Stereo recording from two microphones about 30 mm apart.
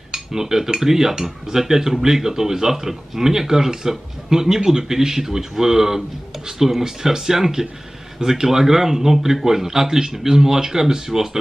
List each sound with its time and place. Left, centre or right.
0.1 s cutlery: centre
0.7 s speech: centre